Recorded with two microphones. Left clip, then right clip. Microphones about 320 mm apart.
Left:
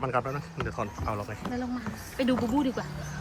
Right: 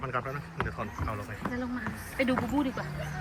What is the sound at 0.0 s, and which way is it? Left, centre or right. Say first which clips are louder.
Speech: left 4 dB; centre.